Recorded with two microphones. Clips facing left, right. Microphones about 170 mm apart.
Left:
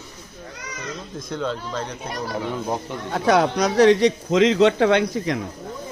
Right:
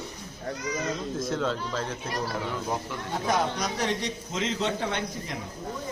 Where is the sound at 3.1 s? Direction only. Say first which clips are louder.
Left 9 dB; 75° left (ahead or behind).